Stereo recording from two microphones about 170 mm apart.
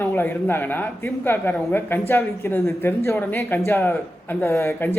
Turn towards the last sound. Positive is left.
turn(degrees=15)  # may be behind; listen again after turning